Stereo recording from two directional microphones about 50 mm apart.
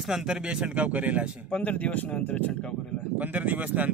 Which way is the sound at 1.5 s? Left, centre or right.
Left.